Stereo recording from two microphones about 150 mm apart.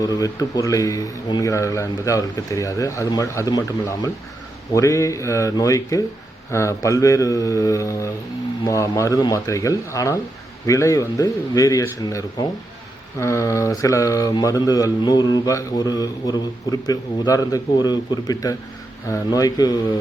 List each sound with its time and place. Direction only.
0.0 s speech: 25° left (ahead or behind)